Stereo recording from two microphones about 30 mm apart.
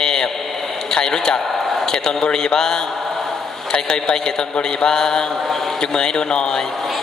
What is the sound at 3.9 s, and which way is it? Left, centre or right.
Speech, left.